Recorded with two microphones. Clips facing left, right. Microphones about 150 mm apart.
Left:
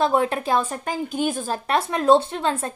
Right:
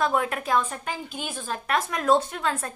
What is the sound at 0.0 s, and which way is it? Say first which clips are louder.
A woman's voice: left 4 dB; 30° left (ahead or behind).